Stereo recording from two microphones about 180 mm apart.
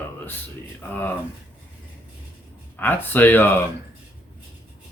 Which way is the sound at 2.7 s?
10° left (ahead or behind).